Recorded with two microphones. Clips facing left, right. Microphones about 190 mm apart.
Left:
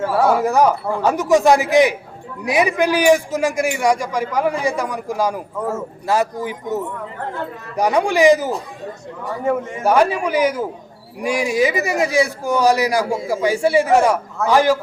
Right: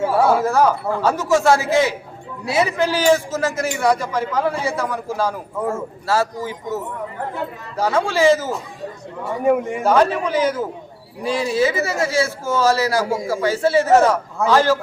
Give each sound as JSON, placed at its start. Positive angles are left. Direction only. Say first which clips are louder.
{"t": 0.0, "sound": "a man's voice", "louder": "even", "side_deg": -10}
{"t": 0.3, "sound": "a man's voice", "louder": "left 1 dB", "side_deg": 15}
{"t": 9.4, "sound": "a man's voice", "louder": "right 3 dB", "side_deg": -15}
{"t": 9.8, "sound": "a man's voice", "louder": "left 2 dB", "side_deg": 10}